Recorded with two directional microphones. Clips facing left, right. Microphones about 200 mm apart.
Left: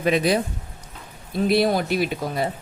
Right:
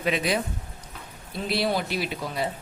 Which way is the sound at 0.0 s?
40° left (ahead or behind).